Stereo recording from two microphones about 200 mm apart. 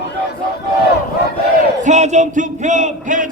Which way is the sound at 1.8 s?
35° right (ahead or behind).